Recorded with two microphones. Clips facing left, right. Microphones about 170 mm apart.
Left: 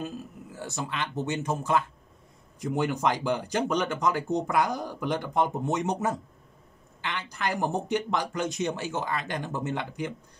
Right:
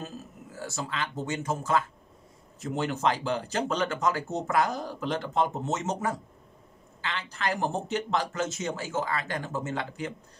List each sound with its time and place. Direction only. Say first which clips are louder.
0.0 s speech: left 4 dB; 15° left (ahead or behind)